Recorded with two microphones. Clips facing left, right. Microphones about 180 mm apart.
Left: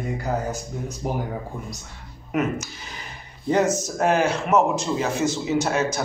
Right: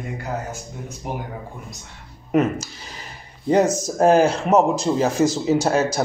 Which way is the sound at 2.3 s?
30° right (ahead or behind).